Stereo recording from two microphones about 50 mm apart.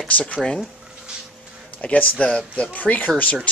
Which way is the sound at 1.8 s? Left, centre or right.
Left.